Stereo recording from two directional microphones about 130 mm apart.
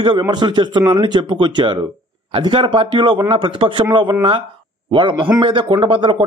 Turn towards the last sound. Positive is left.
turn(degrees=-40)  # may be behind; listen again after turning